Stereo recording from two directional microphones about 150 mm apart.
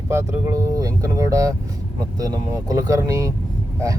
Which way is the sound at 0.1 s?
20° right (ahead or behind).